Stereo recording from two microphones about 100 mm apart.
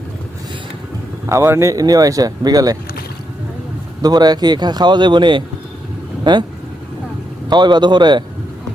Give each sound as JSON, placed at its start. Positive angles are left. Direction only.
{"t": 1.3, "sound": "speech", "side_deg": -25}
{"t": 4.0, "sound": "speech", "side_deg": -40}
{"t": 7.5, "sound": "speech", "side_deg": -50}